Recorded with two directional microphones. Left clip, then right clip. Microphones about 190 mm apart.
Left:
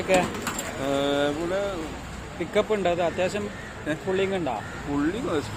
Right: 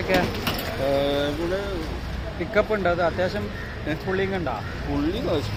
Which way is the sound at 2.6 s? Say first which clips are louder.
Right 2 dB; 20° left (ahead or behind).